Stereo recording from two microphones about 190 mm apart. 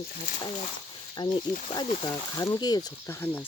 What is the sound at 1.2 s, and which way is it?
Speech, 25° left (ahead or behind).